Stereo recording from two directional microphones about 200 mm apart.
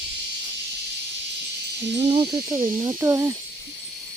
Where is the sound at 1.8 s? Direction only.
20° right (ahead or behind).